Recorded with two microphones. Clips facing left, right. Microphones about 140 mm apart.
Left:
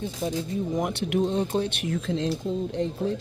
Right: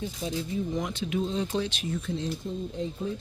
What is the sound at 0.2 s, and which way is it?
Speech, 45° left (ahead or behind).